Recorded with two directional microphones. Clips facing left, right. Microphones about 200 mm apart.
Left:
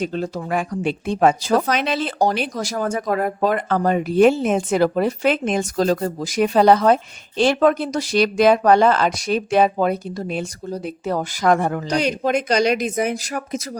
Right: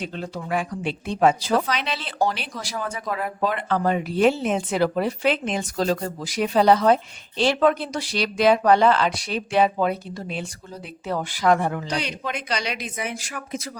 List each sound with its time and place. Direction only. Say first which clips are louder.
0.0 s speech: left 7 dB; 40° left (ahead or behind)